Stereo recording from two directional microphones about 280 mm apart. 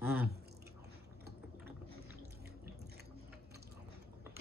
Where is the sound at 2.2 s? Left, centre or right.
Right.